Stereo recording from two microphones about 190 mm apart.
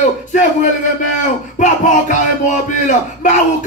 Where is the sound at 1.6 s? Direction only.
40° left (ahead or behind).